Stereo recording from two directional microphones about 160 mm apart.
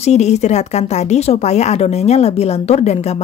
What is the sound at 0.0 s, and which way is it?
Speech, 45° left (ahead or behind).